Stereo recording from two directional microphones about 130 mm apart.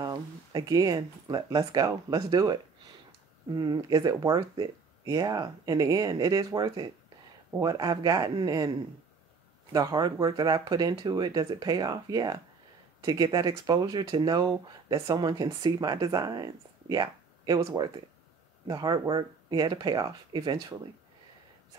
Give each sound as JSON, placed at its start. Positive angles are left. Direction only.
{"t": 0.0, "sound": "speech", "side_deg": -30}